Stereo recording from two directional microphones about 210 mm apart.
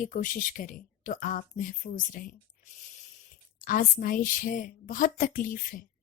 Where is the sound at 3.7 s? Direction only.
40° left (ahead or behind).